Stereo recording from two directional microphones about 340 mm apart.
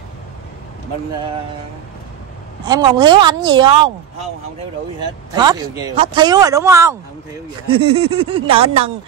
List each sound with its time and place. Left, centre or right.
2.6 s speech: centre
5.3 s speech: centre